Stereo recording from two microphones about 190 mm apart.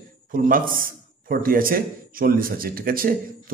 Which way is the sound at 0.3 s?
50° right (ahead or behind).